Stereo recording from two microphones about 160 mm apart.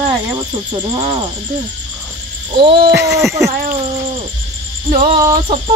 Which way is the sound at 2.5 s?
30° right (ahead or behind).